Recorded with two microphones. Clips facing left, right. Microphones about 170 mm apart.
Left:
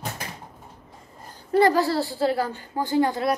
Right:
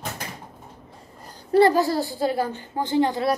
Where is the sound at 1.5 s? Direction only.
25° right (ahead or behind).